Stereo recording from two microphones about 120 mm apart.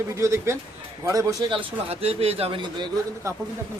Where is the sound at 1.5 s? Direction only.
50° right (ahead or behind).